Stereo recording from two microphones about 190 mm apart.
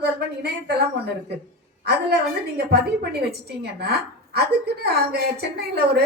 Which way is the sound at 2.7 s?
60° right (ahead or behind).